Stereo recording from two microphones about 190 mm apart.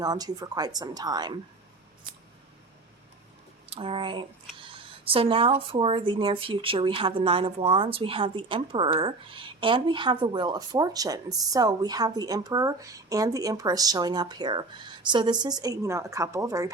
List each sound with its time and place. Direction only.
0.0 s speech: 20° right (ahead or behind)
3.7 s speech: 30° right (ahead or behind)